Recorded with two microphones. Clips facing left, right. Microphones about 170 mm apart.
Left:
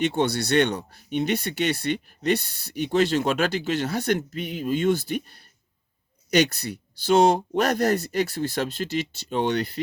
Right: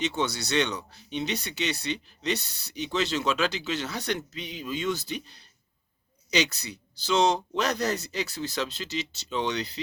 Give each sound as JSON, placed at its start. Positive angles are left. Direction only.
{"t": 0.0, "sound": "speech", "side_deg": 55}